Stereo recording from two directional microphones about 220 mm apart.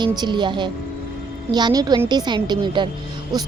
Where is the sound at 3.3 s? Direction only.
20° right (ahead or behind).